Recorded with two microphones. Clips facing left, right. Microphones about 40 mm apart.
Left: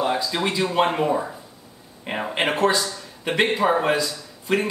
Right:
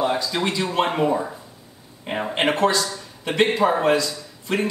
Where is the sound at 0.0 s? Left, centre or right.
Centre.